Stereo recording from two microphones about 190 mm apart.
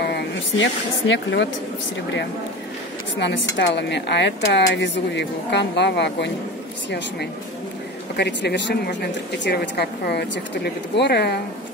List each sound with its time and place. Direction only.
0.0 s speech: 65° left (ahead or behind)
3.2 s a woman's voice: 65° left (ahead or behind)
8.2 s speech: 65° left (ahead or behind)